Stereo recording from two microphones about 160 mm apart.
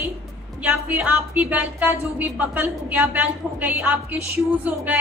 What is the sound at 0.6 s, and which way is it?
A woman's voice, 10° right (ahead or behind).